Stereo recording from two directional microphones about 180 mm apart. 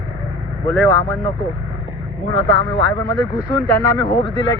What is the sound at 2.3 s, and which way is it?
Speech, 25° left (ahead or behind).